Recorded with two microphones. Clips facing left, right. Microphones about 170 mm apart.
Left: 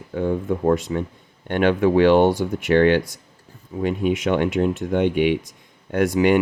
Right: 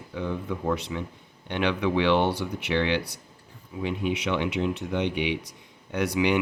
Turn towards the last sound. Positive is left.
turn(degrees=50)  # may be behind; listen again after turning